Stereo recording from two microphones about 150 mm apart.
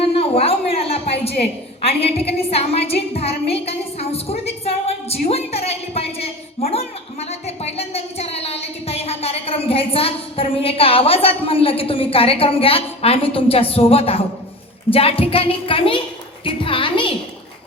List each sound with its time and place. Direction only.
0.2 s a woman's voice: 40° left (ahead or behind)
5.0 s a sound: 40° left (ahead or behind)
14.8 s a woman's voice: 40° left (ahead or behind)